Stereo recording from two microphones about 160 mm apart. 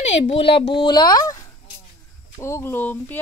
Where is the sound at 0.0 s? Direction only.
40° left (ahead or behind).